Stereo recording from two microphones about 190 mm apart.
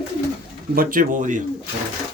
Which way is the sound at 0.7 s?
45° right (ahead or behind).